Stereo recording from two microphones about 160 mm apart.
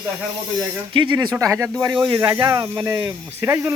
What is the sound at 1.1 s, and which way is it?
Speech, 20° right (ahead or behind).